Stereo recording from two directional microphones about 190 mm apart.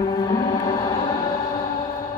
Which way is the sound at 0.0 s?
20° left (ahead or behind).